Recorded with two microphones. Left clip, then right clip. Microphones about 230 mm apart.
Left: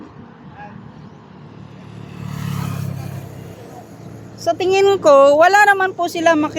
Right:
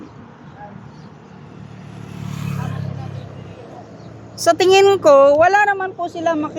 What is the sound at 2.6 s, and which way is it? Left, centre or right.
Vehicle, left.